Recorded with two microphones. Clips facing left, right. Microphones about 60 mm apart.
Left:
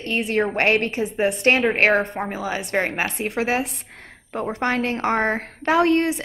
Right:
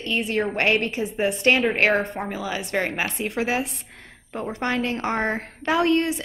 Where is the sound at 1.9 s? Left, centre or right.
Centre.